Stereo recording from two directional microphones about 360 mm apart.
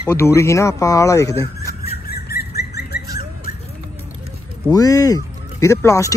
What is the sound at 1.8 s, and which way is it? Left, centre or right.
Squawk, left.